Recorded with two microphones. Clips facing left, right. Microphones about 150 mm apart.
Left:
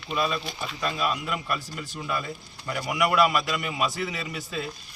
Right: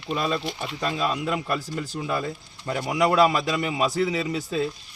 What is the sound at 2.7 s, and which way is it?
A man's voice, 30° right (ahead or behind).